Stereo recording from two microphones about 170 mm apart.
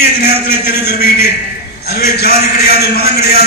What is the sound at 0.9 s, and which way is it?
A man's voice, 65° left (ahead or behind).